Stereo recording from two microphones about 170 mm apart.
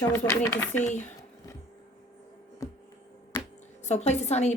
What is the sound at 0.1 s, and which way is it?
Speech, 15° left (ahead or behind).